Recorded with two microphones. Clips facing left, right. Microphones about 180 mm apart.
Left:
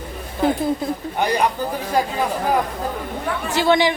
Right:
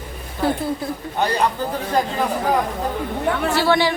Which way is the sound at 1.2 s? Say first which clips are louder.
Even; 15° left (ahead or behind).